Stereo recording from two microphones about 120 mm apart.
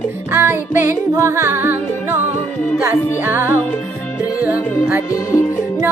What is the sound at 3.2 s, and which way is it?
Music, 20° right (ahead or behind).